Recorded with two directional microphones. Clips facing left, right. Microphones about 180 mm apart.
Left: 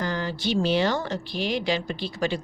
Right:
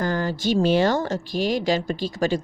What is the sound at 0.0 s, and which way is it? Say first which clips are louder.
A woman's voice: right 4 dB; 45° right (ahead or behind).